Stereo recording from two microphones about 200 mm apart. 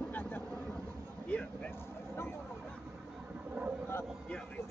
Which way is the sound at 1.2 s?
5° left (ahead or behind).